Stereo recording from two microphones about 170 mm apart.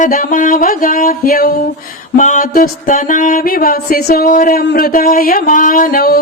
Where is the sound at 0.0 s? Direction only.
55° left (ahead or behind).